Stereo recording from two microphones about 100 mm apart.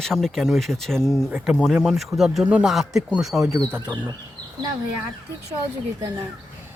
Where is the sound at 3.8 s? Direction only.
45° right (ahead or behind).